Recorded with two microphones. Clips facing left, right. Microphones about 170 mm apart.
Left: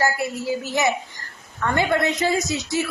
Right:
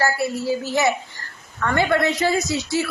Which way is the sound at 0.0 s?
15° left (ahead or behind).